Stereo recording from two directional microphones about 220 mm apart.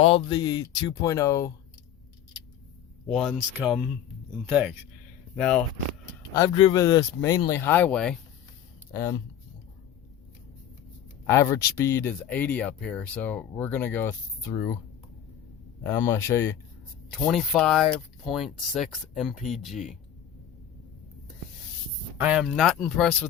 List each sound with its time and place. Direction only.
0.0 s speech: 25° left (ahead or behind)
3.1 s speech: centre (ahead or behind)
5.4 s speech: 5° left (ahead or behind)
6.3 s speech: 15° left (ahead or behind)
11.3 s speech: 15° left (ahead or behind)
15.8 s speech: 10° left (ahead or behind)
17.1 s speech: centre (ahead or behind)
22.2 s speech: 5° right (ahead or behind)